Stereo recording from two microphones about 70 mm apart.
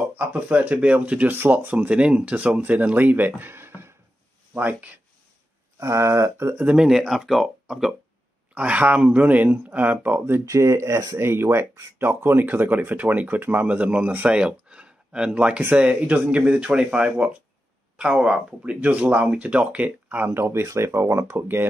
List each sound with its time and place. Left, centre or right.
0.1 s speech: right
4.6 s speech: right
5.8 s a sound: right
6.6 s speech: centre
8.5 s speech: centre
10.4 s speech: right